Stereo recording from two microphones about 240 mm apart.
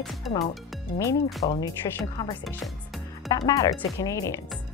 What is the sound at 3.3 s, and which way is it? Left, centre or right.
Speech, centre.